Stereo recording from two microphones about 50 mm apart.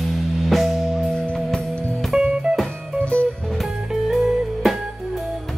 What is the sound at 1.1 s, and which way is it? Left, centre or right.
Music, centre.